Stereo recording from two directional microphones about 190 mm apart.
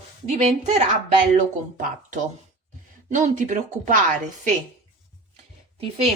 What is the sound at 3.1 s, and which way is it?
Speech, 40° right (ahead or behind).